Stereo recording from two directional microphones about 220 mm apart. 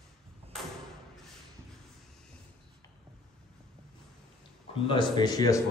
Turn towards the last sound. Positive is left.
turn(degrees=15)  # may be behind; listen again after turning